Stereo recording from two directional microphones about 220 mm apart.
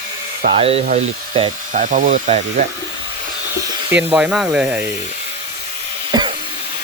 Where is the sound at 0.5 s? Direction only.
25° right (ahead or behind).